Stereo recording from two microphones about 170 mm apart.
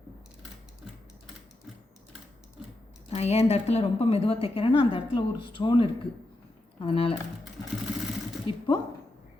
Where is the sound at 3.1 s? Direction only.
40° left (ahead or behind).